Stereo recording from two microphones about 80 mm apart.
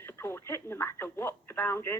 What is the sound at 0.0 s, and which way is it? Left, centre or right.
A woman's voice, left.